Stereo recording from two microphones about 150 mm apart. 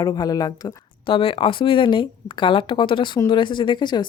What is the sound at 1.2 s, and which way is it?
A woman's voice, 35° left (ahead or behind).